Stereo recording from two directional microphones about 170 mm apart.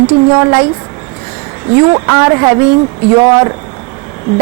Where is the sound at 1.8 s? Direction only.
20° right (ahead or behind).